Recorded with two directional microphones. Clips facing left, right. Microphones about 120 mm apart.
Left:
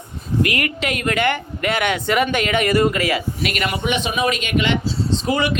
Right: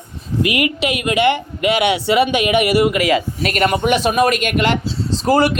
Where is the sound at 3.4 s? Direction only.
45° right (ahead or behind).